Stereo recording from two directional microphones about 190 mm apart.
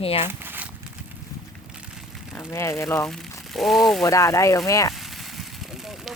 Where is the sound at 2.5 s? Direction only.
15° left (ahead or behind).